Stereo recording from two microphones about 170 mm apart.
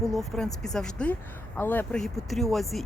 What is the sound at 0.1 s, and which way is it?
Speech, centre (ahead or behind).